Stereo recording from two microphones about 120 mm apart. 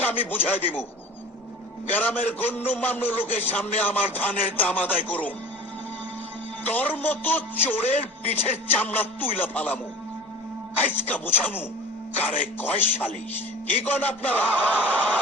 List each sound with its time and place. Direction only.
0.0 s a man's voice: 15° left (ahead or behind)
1.9 s a man's voice: 15° left (ahead or behind)
6.7 s a man's voice: 15° left (ahead or behind)
11.1 s a man's voice: 15° left (ahead or behind)